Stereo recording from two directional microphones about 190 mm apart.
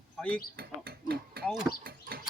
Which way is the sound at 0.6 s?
55° right (ahead or behind).